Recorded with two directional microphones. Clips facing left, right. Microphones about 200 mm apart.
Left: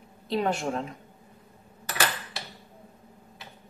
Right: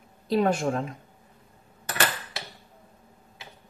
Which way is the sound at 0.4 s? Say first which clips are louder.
Right 4 dB; 45° right (ahead or behind).